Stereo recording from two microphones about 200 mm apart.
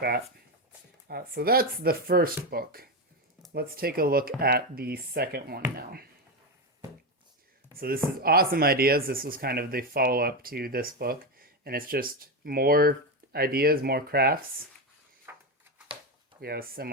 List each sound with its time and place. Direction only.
1.0 s speech: 50° right (ahead or behind)
7.8 s speech: 50° right (ahead or behind)
15.3 s a sound: 10° right (ahead or behind)
16.4 s speech: 50° right (ahead or behind)